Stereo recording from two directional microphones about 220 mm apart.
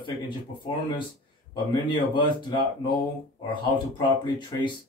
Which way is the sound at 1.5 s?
20° left (ahead or behind).